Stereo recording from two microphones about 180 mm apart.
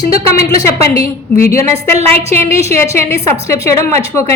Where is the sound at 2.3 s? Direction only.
15° left (ahead or behind).